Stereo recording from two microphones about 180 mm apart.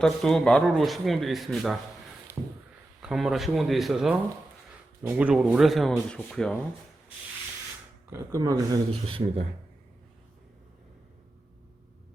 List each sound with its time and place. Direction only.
0.0 s speech: centre (ahead or behind)
2.4 s a sound: 5° right (ahead or behind)
3.0 s speech: centre (ahead or behind)
8.1 s speech: 15° right (ahead or behind)
9.0 s speech: 30° right (ahead or behind)